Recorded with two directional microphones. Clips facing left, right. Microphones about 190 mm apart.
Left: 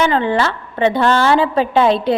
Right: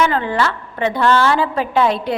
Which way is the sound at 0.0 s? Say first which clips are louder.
Left 2 dB; 25° left (ahead or behind).